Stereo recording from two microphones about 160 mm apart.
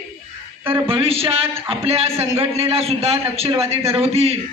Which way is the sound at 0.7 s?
35° right (ahead or behind).